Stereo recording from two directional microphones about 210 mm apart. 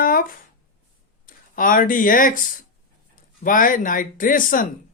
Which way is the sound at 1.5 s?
40° left (ahead or behind).